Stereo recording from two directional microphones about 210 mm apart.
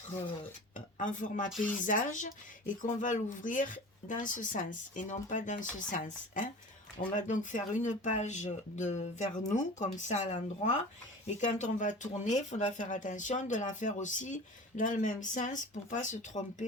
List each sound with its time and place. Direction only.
0.9 s speech: 35° left (ahead or behind)
1.5 s speech: centre (ahead or behind)
1.8 s speech: 40° left (ahead or behind)